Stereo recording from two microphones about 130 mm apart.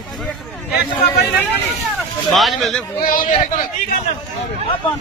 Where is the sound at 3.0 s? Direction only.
90° left.